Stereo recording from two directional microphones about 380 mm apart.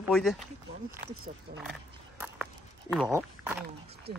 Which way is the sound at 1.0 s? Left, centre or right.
Right.